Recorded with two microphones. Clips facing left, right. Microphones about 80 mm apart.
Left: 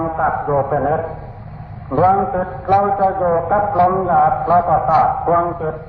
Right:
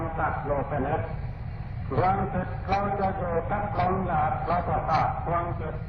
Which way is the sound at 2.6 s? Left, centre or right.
Left.